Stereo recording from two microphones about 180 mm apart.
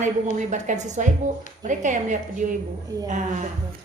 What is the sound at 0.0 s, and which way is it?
A woman's voice, 45° right (ahead or behind).